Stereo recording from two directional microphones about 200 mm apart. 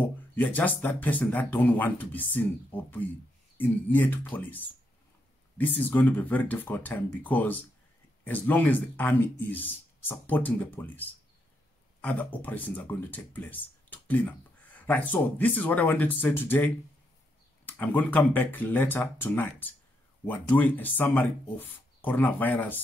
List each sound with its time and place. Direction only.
0.4 s speech: 10° left (ahead or behind)